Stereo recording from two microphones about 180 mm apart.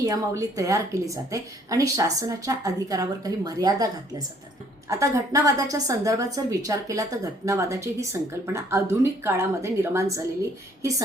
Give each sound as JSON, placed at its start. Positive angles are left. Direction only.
{"t": 0.0, "sound": "a woman's voice", "side_deg": -20}